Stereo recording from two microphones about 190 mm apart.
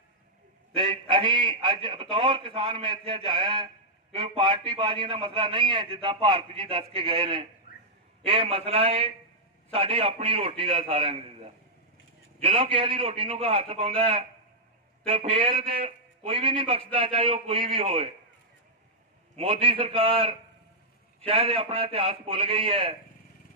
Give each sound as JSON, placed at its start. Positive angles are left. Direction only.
{"t": 0.8, "sound": "a man's voice", "side_deg": -25}
{"t": 12.4, "sound": "a man's voice", "side_deg": -30}
{"t": 19.4, "sound": "a man's voice", "side_deg": -30}